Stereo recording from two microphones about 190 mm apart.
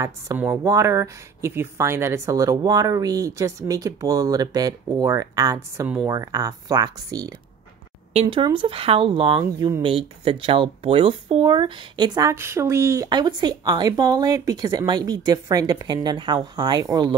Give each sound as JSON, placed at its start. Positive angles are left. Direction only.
{"t": 0.0, "sound": "speech", "side_deg": -15}
{"t": 5.9, "sound": "speech", "side_deg": -5}
{"t": 6.1, "sound": "speech", "side_deg": -20}